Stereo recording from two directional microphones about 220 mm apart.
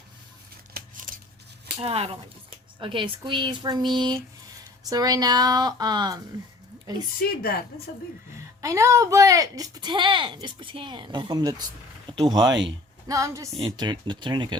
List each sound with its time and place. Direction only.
0.7 s scissors: 40° right (ahead or behind)
1.8 s a woman's voice: 25° right (ahead or behind)
8.6 s a woman's voice: 15° right (ahead or behind)